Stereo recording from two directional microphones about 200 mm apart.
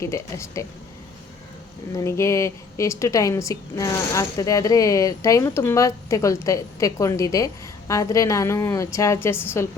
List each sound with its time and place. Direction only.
0.0 s a woman's voice: 15° left (ahead or behind)
1.9 s a woman's voice: 15° left (ahead or behind)